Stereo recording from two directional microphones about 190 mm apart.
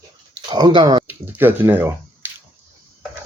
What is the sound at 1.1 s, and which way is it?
Speech, 10° right (ahead or behind).